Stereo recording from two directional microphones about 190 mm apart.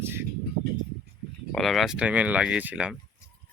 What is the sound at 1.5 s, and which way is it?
Speech, centre (ahead or behind).